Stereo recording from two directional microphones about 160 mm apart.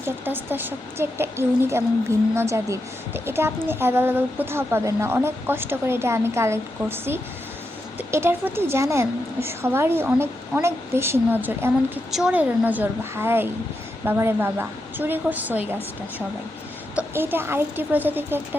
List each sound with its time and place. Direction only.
0.3 s a woman's voice: 10° right (ahead or behind)
16.9 s a woman's voice: 10° right (ahead or behind)